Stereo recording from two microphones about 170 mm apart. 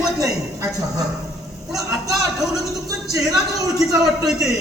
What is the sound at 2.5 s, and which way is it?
Speech, 20° right (ahead or behind).